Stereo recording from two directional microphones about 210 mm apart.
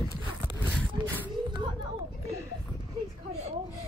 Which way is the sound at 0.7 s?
5° left (ahead or behind).